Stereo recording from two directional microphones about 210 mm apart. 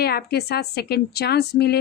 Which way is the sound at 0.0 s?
50° left (ahead or behind).